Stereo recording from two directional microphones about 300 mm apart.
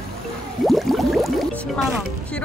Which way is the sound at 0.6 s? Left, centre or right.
Centre.